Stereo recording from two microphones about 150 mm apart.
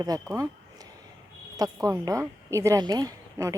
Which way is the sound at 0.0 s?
25° right (ahead or behind).